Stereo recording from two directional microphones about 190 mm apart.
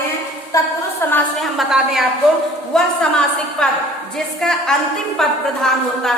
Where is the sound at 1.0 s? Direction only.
15° left (ahead or behind).